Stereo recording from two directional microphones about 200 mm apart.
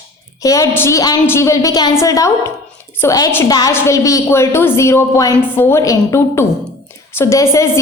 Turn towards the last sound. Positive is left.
turn(degrees=15)  # may be behind; listen again after turning